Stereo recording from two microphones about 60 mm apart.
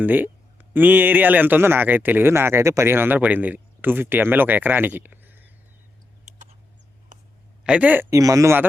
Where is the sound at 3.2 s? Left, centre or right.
Right.